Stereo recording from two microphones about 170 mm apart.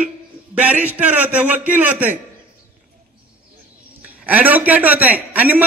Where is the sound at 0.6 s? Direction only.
10° right (ahead or behind).